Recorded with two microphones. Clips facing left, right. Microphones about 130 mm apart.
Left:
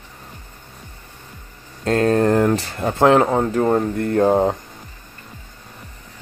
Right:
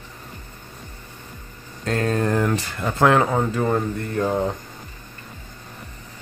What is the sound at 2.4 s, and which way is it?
Speech, 30° left (ahead or behind).